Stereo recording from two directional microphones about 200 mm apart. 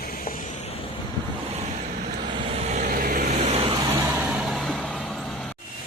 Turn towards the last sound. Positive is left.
turn(degrees=0)  # may be behind; listen again after turning